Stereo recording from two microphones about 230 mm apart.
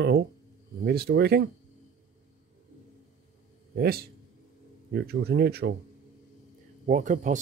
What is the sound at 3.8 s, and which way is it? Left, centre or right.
Speech, right.